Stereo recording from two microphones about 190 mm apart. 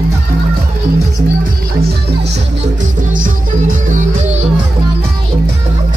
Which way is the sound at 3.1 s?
45° right (ahead or behind).